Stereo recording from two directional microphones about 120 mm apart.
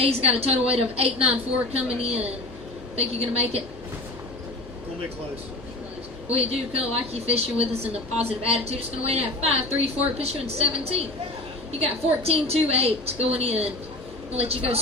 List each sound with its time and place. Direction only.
0.0 s a woman's voice: 55° right (ahead or behind)
6.3 s a woman's voice: 55° right (ahead or behind)